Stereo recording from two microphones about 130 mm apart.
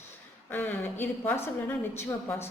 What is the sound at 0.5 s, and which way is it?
Speech, 15° left (ahead or behind).